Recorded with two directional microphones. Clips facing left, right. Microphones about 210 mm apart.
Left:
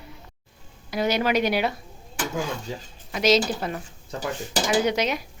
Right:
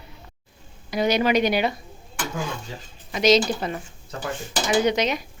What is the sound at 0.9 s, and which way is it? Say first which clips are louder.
Speech: right 2 dB; 5° left (ahead or behind).